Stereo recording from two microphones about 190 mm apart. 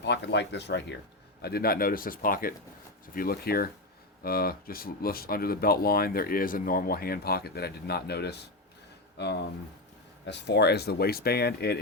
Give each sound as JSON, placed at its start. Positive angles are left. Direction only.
{"t": 0.0, "sound": "speech", "side_deg": 65}
{"t": 10.2, "sound": "speech", "side_deg": 65}